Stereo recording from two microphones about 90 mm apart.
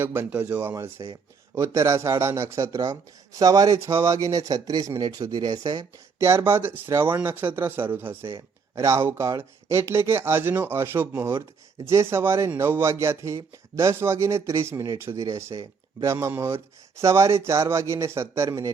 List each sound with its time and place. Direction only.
0.0 s speech: 25° right (ahead or behind); by 5.8 s 45° right (ahead or behind)
6.1 s speech: 30° right (ahead or behind)
17.0 s speech: 35° right (ahead or behind)